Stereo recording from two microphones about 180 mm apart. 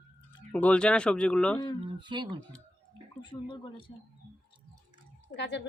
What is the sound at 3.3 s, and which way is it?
Speech, 25° left (ahead or behind).